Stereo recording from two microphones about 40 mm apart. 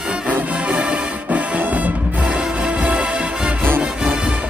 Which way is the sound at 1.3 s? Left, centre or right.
Right.